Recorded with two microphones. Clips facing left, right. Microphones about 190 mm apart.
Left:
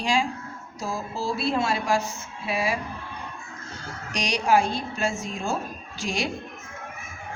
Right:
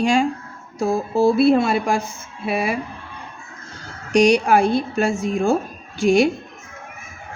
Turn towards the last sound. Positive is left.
turn(degrees=-55)  # may be behind; listen again after turning